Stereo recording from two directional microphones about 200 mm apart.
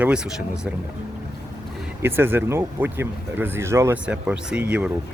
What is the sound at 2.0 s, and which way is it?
Speech, 10° right (ahead or behind).